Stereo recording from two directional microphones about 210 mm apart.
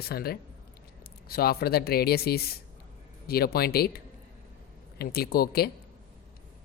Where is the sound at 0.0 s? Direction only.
45° left (ahead or behind).